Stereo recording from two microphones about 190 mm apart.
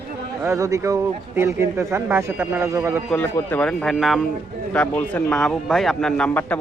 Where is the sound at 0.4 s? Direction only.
15° right (ahead or behind).